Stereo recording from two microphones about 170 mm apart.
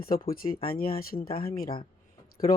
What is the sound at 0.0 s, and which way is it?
Speech, 55° left (ahead or behind).